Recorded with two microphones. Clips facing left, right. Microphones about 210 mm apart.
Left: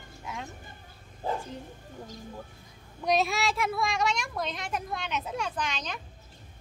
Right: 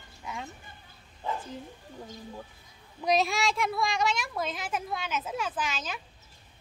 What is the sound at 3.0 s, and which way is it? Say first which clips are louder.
A woman's voice: even; centre (ahead or behind).